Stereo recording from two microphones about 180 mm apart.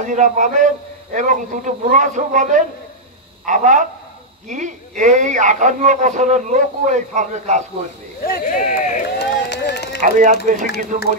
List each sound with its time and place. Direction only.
0.0 s a man's voice: 45° right (ahead or behind)
8.2 s speech: 50° left (ahead or behind)
9.2 s run: 65° left (ahead or behind)
10.0 s a man's voice: 45° right (ahead or behind)